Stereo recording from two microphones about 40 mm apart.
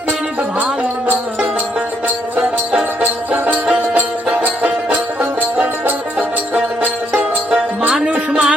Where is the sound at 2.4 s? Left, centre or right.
Right.